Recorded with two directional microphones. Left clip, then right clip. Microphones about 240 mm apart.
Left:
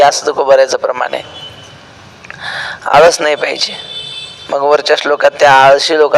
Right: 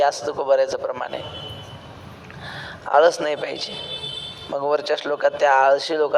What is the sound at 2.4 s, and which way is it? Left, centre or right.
Speech, left.